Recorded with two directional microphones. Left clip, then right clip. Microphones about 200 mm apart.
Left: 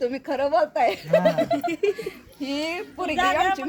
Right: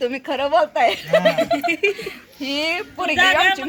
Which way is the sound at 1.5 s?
20° left (ahead or behind).